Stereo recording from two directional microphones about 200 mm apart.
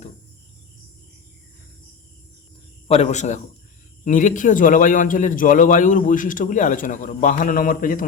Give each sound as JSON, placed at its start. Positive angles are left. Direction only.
{"t": 2.8, "sound": "a man's voice", "side_deg": 30}